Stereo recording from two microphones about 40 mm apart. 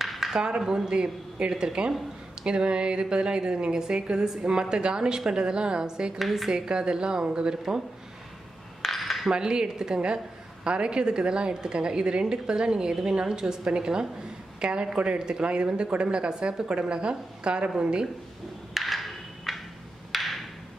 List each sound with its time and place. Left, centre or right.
0.0 s a sound: centre
0.4 s a woman's voice: centre
6.1 s a woman's voice: centre
6.6 s a woman's voice: right
8.8 s dishes: centre
9.3 s a woman's voice: centre
18.7 s a sound: centre
20.1 s wood block: centre